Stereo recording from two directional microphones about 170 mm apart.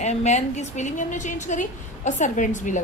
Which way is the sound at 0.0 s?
40° left (ahead or behind).